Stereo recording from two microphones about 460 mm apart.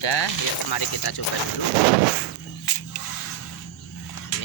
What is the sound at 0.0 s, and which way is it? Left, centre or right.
Speech, left.